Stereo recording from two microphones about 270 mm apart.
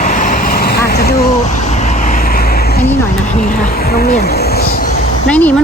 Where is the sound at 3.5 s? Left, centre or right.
Left.